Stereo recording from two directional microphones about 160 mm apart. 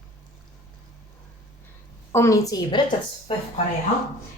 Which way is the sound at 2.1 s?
20° left (ahead or behind).